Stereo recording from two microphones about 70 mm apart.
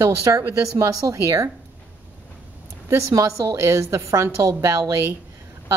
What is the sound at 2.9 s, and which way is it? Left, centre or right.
A woman's voice, right.